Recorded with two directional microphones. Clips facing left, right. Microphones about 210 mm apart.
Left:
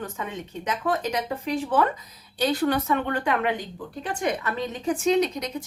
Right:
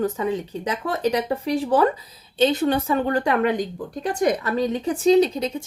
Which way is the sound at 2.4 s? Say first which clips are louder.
Right 4 dB; 25° right (ahead or behind).